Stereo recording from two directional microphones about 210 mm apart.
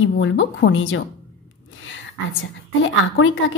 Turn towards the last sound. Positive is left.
turn(degrees=70)  # may be behind; listen again after turning